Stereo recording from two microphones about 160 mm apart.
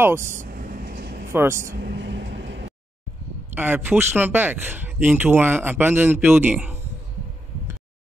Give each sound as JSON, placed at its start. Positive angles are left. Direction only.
{"t": 0.0, "sound": "speech", "side_deg": -15}
{"t": 0.3, "sound": "vehicle", "side_deg": -60}
{"t": 1.3, "sound": "speech", "side_deg": -15}
{"t": 1.8, "sound": "vehicle", "side_deg": -90}
{"t": 3.5, "sound": "speech", "side_deg": -10}